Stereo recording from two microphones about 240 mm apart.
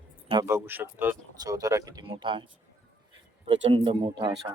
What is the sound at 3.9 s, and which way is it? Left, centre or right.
Speech, centre.